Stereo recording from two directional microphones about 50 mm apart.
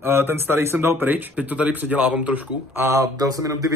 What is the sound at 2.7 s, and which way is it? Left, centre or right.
Speech, right.